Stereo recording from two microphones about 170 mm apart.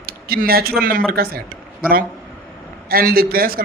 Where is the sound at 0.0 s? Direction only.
60° right (ahead or behind).